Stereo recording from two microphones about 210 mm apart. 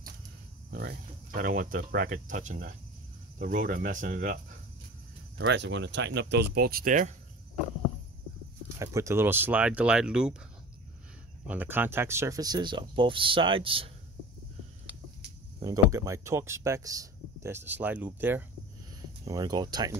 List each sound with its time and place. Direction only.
0.7 s speech: 50° right (ahead or behind)
5.4 s speech: 55° right (ahead or behind); by 7.2 s 40° right (ahead or behind)
8.7 s speech: 15° right (ahead or behind)
11.4 s speech: 10° right (ahead or behind); by 13.8 s 25° right (ahead or behind)
15.6 s speech: 15° right (ahead or behind)